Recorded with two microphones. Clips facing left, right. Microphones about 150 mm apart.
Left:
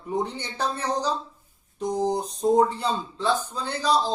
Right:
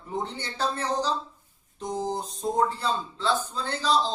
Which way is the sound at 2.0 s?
15° left (ahead or behind).